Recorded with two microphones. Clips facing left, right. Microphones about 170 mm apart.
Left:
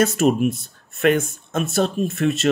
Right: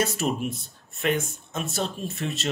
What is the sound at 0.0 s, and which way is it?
Speech, 50° left (ahead or behind).